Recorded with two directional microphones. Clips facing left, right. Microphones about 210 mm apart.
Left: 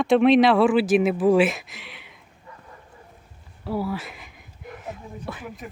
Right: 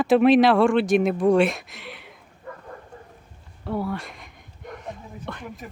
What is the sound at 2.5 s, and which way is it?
Bow-wow, 55° right (ahead or behind).